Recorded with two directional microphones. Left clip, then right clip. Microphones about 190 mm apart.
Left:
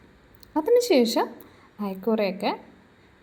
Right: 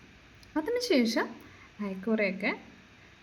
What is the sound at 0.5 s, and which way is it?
A woman's voice, 15° left (ahead or behind).